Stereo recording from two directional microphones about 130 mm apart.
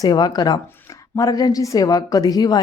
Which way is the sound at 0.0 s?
30° left (ahead or behind).